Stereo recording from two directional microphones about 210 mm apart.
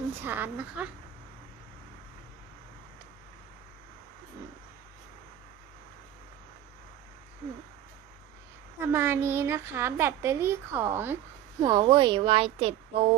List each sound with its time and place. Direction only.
0.2 s a woman's voice: 10° right (ahead or behind)
8.8 s a woman's voice: 10° right (ahead or behind); by 13.1 s 25° right (ahead or behind)